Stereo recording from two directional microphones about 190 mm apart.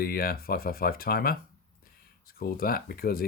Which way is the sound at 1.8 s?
50° left (ahead or behind).